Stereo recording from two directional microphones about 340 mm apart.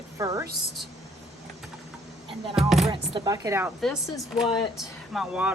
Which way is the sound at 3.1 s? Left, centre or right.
Centre.